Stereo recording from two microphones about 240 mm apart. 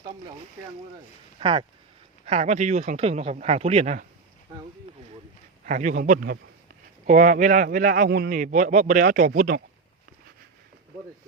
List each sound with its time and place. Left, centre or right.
0.0 s speech: centre
1.4 s speech: right
5.6 s speech: right